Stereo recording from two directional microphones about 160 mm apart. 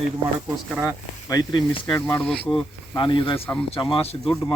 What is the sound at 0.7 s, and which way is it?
Speech, 5° right (ahead or behind).